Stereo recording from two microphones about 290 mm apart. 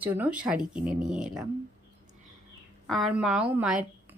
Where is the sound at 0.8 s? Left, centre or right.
Right.